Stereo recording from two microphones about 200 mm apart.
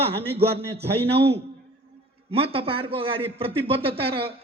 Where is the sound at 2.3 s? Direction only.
30° right (ahead or behind).